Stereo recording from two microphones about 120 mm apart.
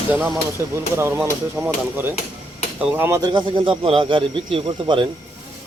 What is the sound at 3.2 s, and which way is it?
Speech, 40° right (ahead or behind).